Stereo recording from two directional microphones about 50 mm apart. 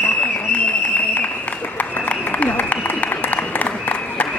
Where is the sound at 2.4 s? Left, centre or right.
Left.